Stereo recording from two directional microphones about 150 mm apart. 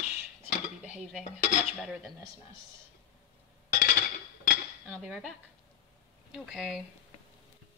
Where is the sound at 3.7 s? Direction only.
75° left (ahead or behind).